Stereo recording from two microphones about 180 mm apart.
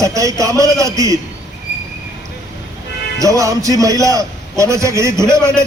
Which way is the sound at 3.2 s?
20° right (ahead or behind).